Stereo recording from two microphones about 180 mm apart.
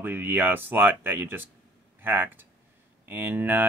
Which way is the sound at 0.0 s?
10° right (ahead or behind).